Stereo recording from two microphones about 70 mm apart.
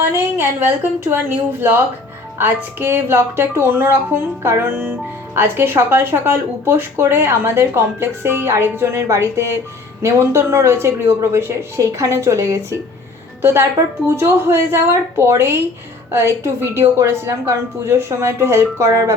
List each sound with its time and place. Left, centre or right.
0.0 s speech: right